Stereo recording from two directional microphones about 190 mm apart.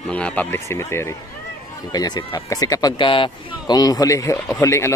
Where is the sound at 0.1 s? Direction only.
5° left (ahead or behind).